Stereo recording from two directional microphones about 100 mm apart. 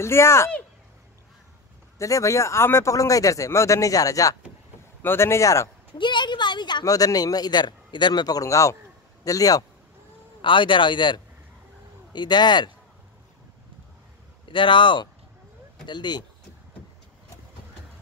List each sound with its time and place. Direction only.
0.0 s speech: 25° left (ahead or behind)
2.0 s speech: 30° left (ahead or behind)
5.9 s a sound: 50° left (ahead or behind)
6.8 s speech: 35° left (ahead or behind)
10.4 s speech: 55° left (ahead or behind)
14.5 s speech: 55° left (ahead or behind)